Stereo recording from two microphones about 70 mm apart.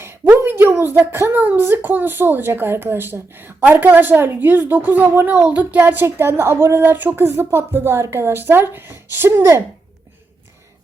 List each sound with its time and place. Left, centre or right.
0.0 s a woman's voice: right